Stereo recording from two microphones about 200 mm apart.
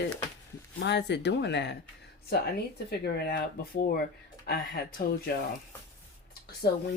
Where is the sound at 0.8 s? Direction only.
60° left (ahead or behind).